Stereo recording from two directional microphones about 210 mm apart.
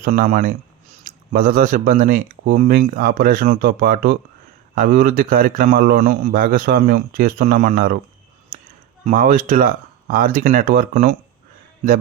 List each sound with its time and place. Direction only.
0.0 s a man's voice: 40° right (ahead or behind)
9.0 s speech: 40° right (ahead or behind)